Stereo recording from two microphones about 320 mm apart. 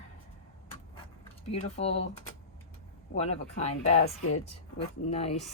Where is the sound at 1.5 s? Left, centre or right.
Centre.